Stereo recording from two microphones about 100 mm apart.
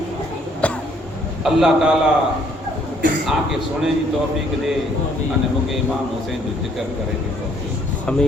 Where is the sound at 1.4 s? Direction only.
5° right (ahead or behind).